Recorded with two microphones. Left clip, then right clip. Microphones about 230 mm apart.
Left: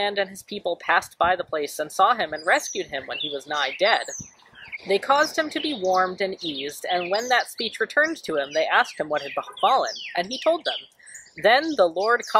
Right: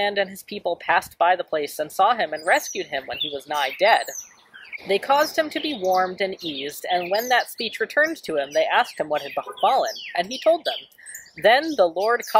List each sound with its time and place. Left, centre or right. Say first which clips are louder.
0.0 s speech: right 2 dB; centre
6.3 s a woman's voice: even; right
6.6 s speech: right 2 dB; centre